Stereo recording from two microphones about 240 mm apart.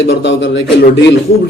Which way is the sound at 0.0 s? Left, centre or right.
Left.